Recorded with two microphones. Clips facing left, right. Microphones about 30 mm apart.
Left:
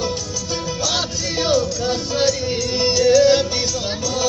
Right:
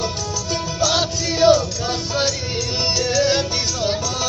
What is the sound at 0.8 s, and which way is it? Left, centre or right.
Music, right.